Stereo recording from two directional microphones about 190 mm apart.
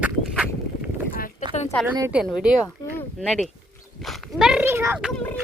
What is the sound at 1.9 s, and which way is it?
A woman's voice, 10° right (ahead or behind).